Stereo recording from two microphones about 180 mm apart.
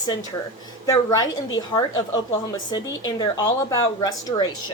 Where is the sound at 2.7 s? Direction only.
25° left (ahead or behind).